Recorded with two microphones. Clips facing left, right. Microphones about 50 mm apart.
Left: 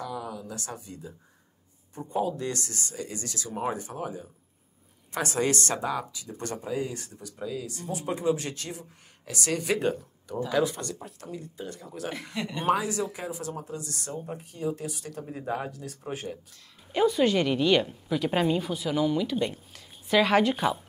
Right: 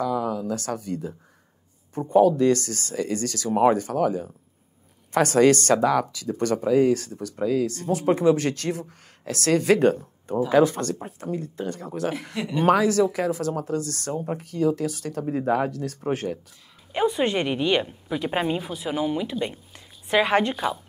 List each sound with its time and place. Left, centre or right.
0.0 s speech: right
6.2 s speech: right
9.9 s speech: right
12.4 s speech: centre
12.6 s speech: right
14.1 s speech: right
14.4 s speech: right
16.9 s a woman's voice: right